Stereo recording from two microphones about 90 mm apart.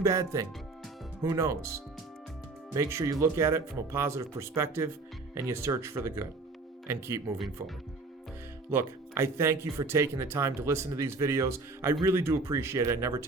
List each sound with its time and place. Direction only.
0.0 s speech: 35° right (ahead or behind)
8.7 s speech: 30° right (ahead or behind)